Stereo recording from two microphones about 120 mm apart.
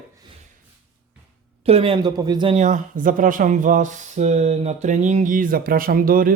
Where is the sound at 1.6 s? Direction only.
55° right (ahead or behind).